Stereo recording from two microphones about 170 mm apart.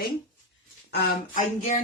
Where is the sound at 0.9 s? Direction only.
50° left (ahead or behind).